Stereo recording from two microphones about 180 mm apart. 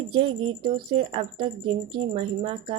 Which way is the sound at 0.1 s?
30° right (ahead or behind).